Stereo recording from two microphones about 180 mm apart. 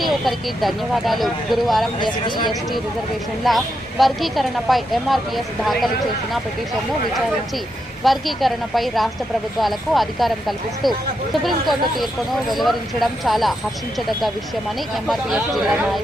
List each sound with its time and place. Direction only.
0.0 s speech: centre (ahead or behind)
2.0 s speech: 25° left (ahead or behind)
3.4 s speech: centre (ahead or behind)
8.0 s speech: centre (ahead or behind)
15.0 s speech: centre (ahead or behind)